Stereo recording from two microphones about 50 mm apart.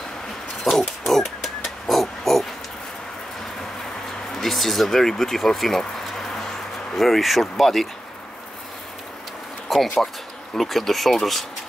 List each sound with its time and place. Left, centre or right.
0.7 s pig: centre
4.4 s speech: centre
9.7 s a sound: centre
10.6 s speech: centre